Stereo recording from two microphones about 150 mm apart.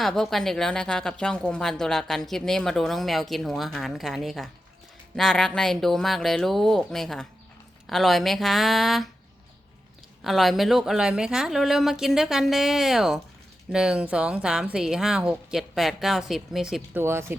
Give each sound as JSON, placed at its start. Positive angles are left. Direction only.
{"t": 0.0, "sound": "speech", "side_deg": 0}
{"t": 10.2, "sound": "speech", "side_deg": 0}
{"t": 17.0, "sound": "speech", "side_deg": -15}